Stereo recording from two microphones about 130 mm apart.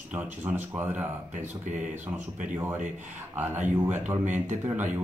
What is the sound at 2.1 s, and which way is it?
Speech, 70° right (ahead or behind).